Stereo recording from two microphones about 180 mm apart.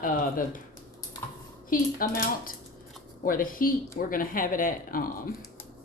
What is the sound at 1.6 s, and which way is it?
Speech, 50° left (ahead or behind).